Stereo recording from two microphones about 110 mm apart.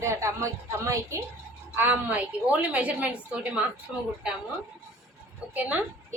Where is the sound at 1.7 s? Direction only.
15° right (ahead or behind).